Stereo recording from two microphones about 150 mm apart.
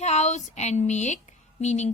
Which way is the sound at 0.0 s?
50° left (ahead or behind).